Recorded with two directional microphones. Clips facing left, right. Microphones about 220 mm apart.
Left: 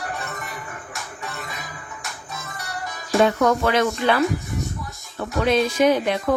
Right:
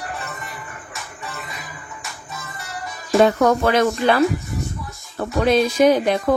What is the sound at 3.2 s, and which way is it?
Speech, 40° right (ahead or behind).